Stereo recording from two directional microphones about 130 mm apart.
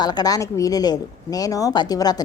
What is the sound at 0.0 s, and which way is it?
Speech, 30° left (ahead or behind).